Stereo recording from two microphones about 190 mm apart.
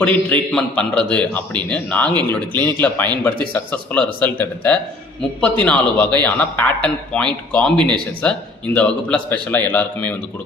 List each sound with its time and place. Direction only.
0.0 s a man's voice: 5° left (ahead or behind)